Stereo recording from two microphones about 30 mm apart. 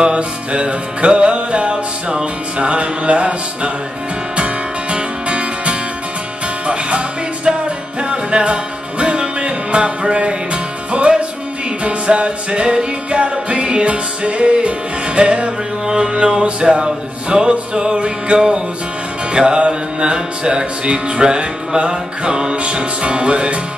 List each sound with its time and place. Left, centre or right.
0.0 s music: right
4.9 s music: right
7.5 s music: right
8.0 s music: right